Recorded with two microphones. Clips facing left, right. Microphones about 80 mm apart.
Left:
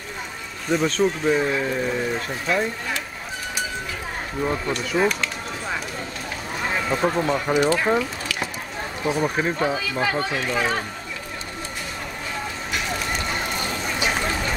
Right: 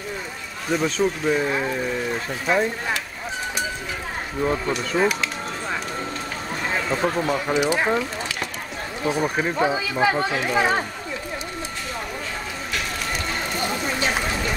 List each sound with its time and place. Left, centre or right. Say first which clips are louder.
0.7 s speech: left 1 dB; centre
2.5 s speech: right 2 dB; right
4.4 s speech: right 2 dB; centre
6.9 s speech: left 1 dB; centre
7.6 s speech: left 1 dB; centre
9.0 s speech: even; centre
9.6 s speech: right 2 dB; centre
14.1 s a sound: even; centre